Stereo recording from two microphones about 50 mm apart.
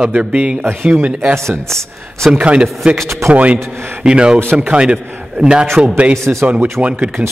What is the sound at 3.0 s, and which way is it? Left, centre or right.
Speech, right.